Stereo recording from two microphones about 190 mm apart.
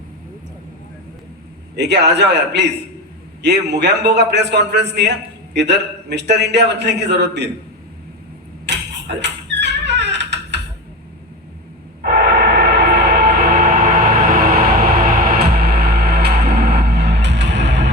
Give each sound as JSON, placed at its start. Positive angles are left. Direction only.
{"t": 1.7, "sound": "a man's voice", "side_deg": -65}
{"t": 8.6, "sound": "a sound", "side_deg": -65}
{"t": 12.0, "sound": "train", "side_deg": -60}